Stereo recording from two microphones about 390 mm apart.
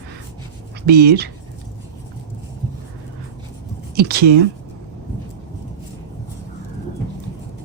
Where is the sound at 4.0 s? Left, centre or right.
Right.